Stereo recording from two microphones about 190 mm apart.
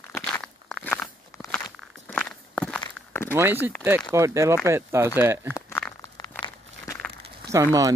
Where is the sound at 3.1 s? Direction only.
10° left (ahead or behind).